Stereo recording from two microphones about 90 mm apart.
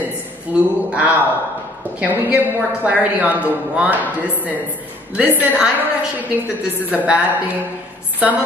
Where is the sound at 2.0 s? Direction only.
20° right (ahead or behind).